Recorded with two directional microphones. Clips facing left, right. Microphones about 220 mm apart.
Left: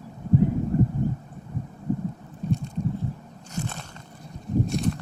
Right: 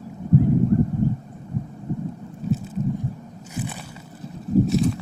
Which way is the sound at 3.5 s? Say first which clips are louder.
Right 2 dB; 5° right (ahead or behind).